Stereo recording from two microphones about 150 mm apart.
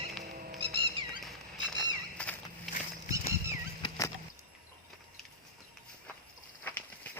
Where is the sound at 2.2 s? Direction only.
10° left (ahead or behind).